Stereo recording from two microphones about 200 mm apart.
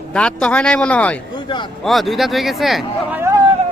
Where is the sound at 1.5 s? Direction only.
25° left (ahead or behind).